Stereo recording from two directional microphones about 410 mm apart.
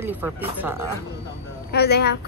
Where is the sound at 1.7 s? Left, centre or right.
Left.